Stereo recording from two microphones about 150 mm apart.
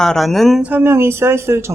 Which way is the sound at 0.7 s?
15° right (ahead or behind).